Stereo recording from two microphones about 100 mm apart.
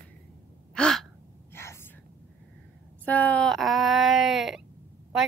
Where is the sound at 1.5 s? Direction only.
25° left (ahead or behind).